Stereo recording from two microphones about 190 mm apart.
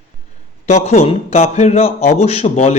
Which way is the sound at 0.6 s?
35° left (ahead or behind).